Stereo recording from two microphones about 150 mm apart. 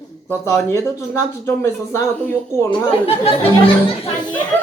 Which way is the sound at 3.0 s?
40° left (ahead or behind).